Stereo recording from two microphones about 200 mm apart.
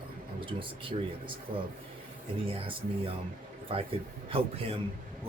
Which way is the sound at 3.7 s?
25° right (ahead or behind).